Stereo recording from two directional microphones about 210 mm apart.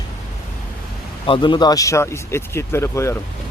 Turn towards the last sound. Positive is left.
turn(degrees=15)  # may be behind; listen again after turning